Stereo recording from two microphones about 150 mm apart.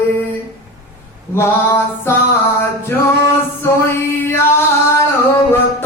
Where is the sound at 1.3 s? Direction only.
15° left (ahead or behind).